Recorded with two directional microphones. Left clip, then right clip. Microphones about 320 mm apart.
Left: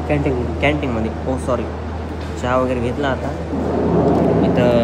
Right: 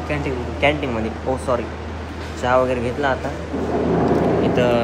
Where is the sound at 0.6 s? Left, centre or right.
Centre.